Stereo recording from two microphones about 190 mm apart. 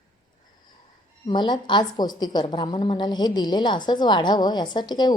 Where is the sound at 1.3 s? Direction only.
25° left (ahead or behind).